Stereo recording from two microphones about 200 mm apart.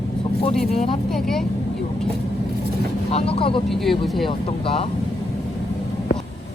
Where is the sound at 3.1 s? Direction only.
30° left (ahead or behind).